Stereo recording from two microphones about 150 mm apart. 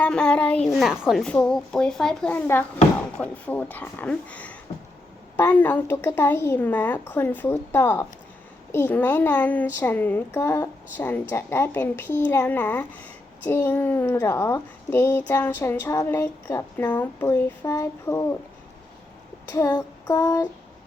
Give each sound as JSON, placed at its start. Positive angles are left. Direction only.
{"t": 0.0, "sound": "a woman's voice", "side_deg": 5}
{"t": 19.5, "sound": "child singing", "side_deg": 20}